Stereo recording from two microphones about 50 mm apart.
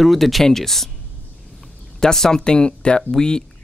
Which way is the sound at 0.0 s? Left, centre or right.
Centre.